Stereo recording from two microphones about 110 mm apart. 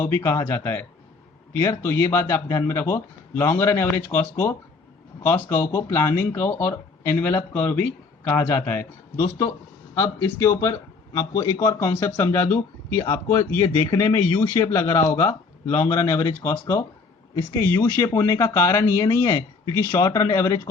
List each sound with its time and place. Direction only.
0.0 s a man's voice: 20° left (ahead or behind)